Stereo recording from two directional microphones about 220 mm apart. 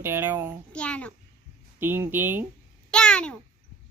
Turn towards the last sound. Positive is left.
turn(degrees=5)  # may be behind; listen again after turning